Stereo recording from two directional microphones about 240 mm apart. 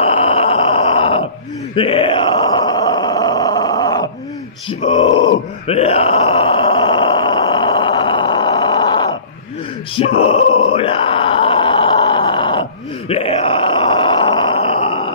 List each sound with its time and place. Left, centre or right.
0.0 s groan: left
4.6 s speech: left
5.3 s groan: left
9.9 s speech: left
10.7 s groan: left